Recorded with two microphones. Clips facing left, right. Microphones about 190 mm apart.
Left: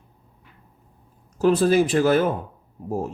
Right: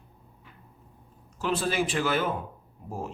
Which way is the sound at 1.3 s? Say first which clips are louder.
Left 10 dB; 40° left (ahead or behind).